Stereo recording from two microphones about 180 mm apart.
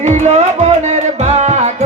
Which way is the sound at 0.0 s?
40° right (ahead or behind).